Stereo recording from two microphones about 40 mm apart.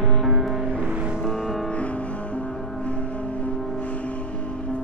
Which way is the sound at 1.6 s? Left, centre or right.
Left.